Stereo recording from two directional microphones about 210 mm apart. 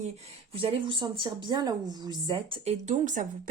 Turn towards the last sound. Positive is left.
turn(degrees=-35)  # may be behind; listen again after turning